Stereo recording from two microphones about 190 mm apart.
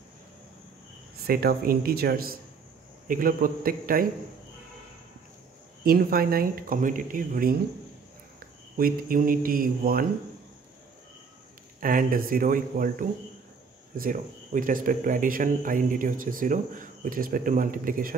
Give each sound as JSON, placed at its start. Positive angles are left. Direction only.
{"t": 1.2, "sound": "speech", "side_deg": -50}
{"t": 5.9, "sound": "speech", "side_deg": -50}
{"t": 8.7, "sound": "speech", "side_deg": -50}
{"t": 11.8, "sound": "speech", "side_deg": -45}